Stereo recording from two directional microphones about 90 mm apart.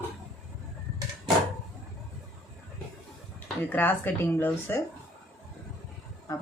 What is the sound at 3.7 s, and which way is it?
Speech, 20° left (ahead or behind).